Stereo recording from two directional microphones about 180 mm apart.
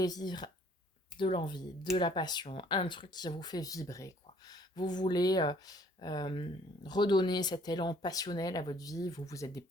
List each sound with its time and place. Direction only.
0.0 s speech: 20° left (ahead or behind)